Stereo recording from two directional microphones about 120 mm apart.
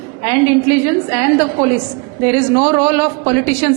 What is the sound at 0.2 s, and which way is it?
A woman's voice, 20° right (ahead or behind).